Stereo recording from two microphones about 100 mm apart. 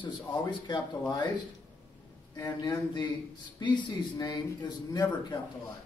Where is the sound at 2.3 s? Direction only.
35° left (ahead or behind).